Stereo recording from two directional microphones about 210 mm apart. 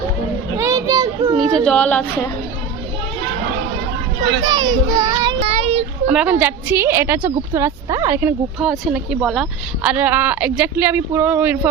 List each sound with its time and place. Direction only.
0.5 s child singing: 15° right (ahead or behind)
1.5 s a woman's voice: 5° left (ahead or behind)
4.4 s child singing: 20° right (ahead or behind)
5.4 s child singing: 30° right (ahead or behind)
6.1 s a woman's voice: 5° right (ahead or behind)